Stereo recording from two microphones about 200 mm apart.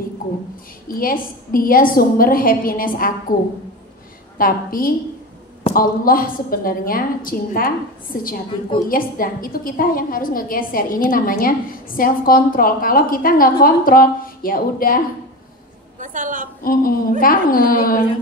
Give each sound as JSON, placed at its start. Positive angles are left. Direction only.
{"t": 0.8, "sound": "a woman's voice", "side_deg": 45}
{"t": 4.4, "sound": "a woman's voice", "side_deg": 45}
{"t": 16.0, "sound": "a woman's voice", "side_deg": -40}
{"t": 16.6, "sound": "a woman's voice", "side_deg": 45}